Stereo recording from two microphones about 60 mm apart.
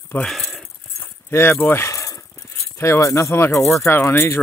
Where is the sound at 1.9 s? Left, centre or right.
Left.